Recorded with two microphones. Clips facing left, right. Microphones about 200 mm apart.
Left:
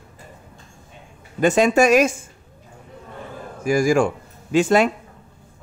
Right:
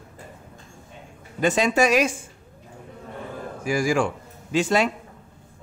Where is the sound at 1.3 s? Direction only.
50° left (ahead or behind).